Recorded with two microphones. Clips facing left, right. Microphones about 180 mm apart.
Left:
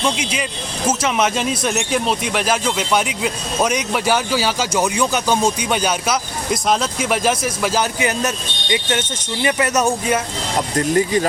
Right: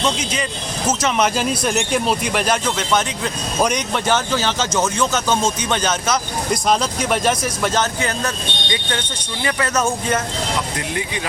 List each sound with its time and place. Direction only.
0.0 s speech: 10° left (ahead or behind)
8.7 s speech: 20° left (ahead or behind)
10.8 s speech: 40° left (ahead or behind)